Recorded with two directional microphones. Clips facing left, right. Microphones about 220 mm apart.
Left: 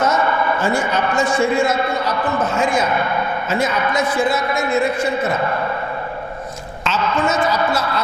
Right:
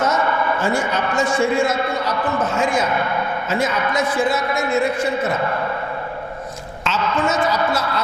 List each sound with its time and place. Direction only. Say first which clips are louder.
0.0 s a man's voice: left 2 dB; 20° left (ahead or behind)
6.8 s a woman's voice: left 1 dB; 15° left (ahead or behind)